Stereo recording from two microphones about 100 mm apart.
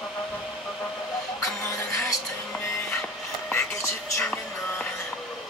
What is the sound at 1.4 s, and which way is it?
Music, 30° left (ahead or behind).